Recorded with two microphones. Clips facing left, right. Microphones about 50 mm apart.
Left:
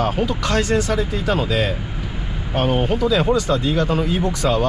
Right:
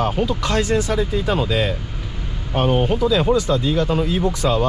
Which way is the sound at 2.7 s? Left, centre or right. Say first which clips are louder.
Even; centre.